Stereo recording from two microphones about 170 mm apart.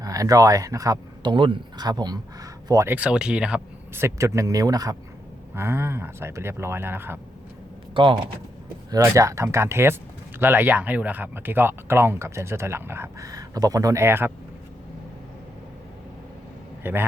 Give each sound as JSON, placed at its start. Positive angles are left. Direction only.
{"t": 0.0, "sound": "speech", "side_deg": -20}
{"t": 2.9, "sound": "speech", "side_deg": -5}
{"t": 8.0, "sound": "speech", "side_deg": -30}
{"t": 8.9, "sound": "speech", "side_deg": -20}
{"t": 16.8, "sound": "speech", "side_deg": -10}